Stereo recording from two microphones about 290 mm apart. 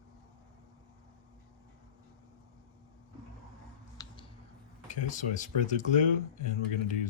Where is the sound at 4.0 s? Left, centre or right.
Centre.